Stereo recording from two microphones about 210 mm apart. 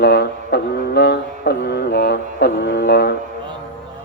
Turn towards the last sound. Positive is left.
turn(degrees=50)  # may be behind; listen again after turning